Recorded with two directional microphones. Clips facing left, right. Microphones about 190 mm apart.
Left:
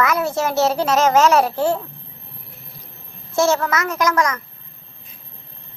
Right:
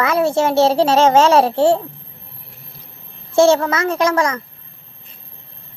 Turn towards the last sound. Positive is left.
turn(degrees=-30)  # may be behind; listen again after turning